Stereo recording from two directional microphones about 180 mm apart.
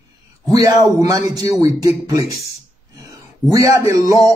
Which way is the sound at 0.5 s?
20° right (ahead or behind).